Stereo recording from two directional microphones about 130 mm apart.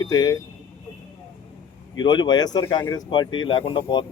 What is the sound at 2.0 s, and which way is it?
Speech, 35° left (ahead or behind).